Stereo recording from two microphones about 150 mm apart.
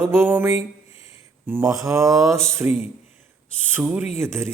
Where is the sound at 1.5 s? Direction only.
20° right (ahead or behind).